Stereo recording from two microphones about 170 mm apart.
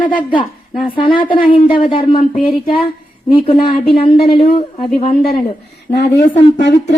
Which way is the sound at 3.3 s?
30° left (ahead or behind).